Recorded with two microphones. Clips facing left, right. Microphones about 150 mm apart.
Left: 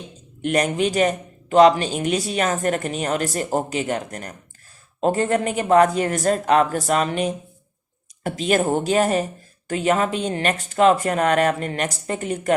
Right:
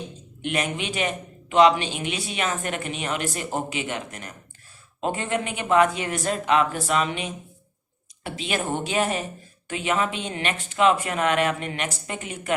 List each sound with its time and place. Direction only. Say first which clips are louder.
0.4 s a man's voice: left 7 dB; 40° left (ahead or behind)